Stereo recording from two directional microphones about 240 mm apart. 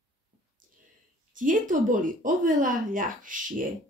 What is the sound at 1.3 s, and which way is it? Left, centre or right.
Speech, right.